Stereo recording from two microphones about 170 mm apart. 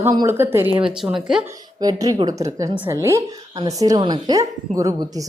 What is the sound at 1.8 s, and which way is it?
Speech, 20° right (ahead or behind).